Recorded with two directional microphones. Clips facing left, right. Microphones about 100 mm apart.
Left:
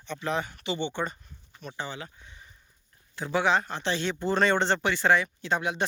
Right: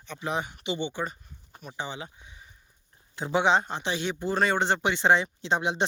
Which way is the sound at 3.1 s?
20° right (ahead or behind).